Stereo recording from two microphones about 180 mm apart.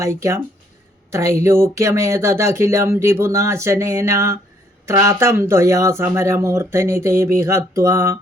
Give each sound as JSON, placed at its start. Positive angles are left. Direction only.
{"t": 0.0, "sound": "speech", "side_deg": -15}